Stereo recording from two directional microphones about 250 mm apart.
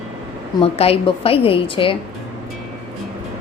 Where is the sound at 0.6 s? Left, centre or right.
Left.